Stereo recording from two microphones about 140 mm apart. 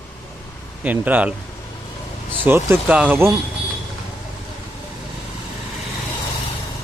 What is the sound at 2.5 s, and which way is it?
Speech, 15° right (ahead or behind).